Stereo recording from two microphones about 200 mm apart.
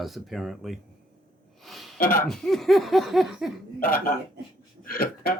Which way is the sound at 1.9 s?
45° left (ahead or behind).